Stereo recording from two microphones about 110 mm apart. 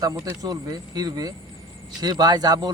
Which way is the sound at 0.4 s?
35° right (ahead or behind).